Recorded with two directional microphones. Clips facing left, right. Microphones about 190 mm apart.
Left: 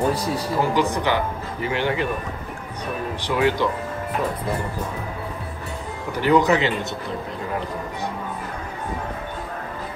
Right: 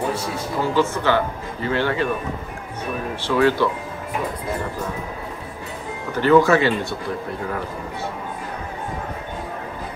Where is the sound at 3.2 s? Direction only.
15° left (ahead or behind).